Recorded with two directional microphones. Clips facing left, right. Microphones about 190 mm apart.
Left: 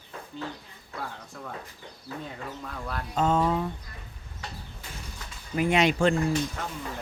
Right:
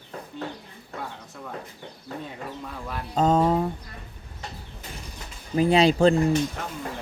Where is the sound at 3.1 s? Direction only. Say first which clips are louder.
Right 4 dB; 35° right (ahead or behind).